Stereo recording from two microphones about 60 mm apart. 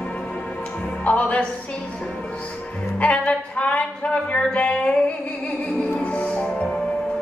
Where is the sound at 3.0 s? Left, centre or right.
Left.